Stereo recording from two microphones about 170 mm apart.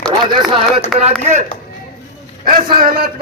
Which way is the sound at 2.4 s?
55° right (ahead or behind).